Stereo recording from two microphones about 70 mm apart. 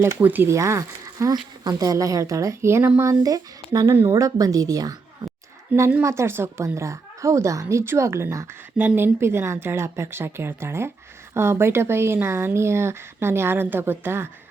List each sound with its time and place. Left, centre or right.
0.2 s speech: right
0.4 s speech: right
3.0 s speech: right
6.0 s speech: right